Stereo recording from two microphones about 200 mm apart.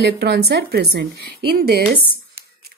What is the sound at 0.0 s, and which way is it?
A woman's voice, 55° right (ahead or behind).